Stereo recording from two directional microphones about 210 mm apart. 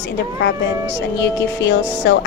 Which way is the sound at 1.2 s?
55° left (ahead or behind).